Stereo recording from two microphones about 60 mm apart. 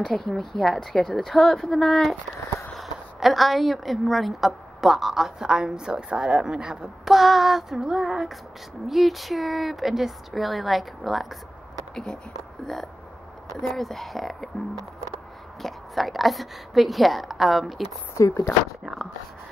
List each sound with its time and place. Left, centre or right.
0.0 s a woman's voice: centre
11.9 s speech: centre
13.5 s a woman's voice: centre
15.6 s a woman's voice: centre
18.1 s speech: left